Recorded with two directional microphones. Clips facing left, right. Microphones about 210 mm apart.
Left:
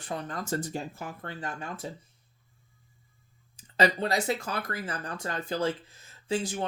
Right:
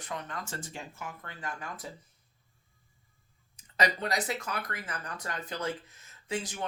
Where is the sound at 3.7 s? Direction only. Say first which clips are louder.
Left 4 dB; 30° left (ahead or behind).